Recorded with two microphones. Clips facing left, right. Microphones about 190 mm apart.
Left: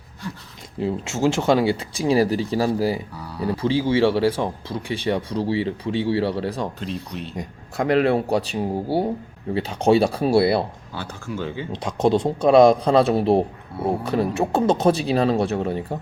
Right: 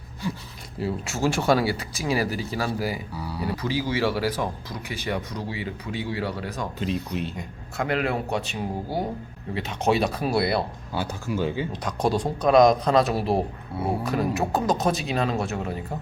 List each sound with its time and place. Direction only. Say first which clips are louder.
0.8 s speech: left 4 dB; 20° left (ahead or behind)
3.2 s speech: left 3 dB; 5° right (ahead or behind)
3.5 s speech: left 8 dB; 25° left (ahead or behind)
6.7 s speech: right 2 dB; 5° right (ahead or behind)
7.3 s speech: left 4 dB; 35° left (ahead or behind)
10.9 s speech: right 3 dB; 10° right (ahead or behind)
11.7 s speech: left 5 dB; 25° left (ahead or behind)